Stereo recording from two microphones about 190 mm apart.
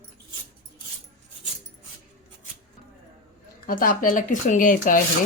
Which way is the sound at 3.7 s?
45° left (ahead or behind).